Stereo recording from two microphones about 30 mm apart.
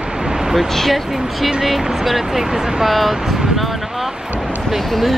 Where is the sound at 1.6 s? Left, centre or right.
Centre.